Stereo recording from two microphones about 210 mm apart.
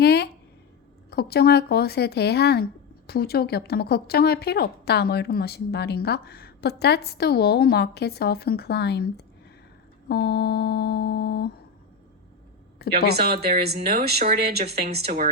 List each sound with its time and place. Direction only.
0.0 s a sound: 50° left (ahead or behind)
1.1 s a woman's voice: 50° left (ahead or behind)
13.1 s speech: 50° right (ahead or behind)